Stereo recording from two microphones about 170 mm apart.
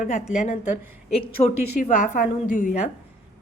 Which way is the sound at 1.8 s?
50° left (ahead or behind).